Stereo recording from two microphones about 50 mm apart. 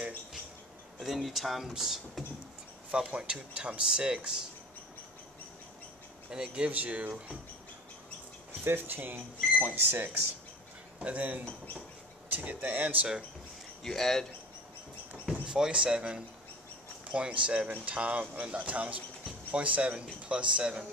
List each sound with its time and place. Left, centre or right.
0.9 s speech: centre
2.9 s speech: centre
6.3 s speech: centre
6.7 s speech: right
8.6 s speech: right
11.0 s speech: right
13.8 s speech: centre
15.4 s speech: centre